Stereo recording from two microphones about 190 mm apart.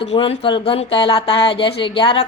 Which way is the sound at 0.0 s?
30° left (ahead or behind).